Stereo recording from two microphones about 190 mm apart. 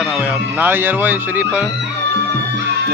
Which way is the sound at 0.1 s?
5° right (ahead or behind).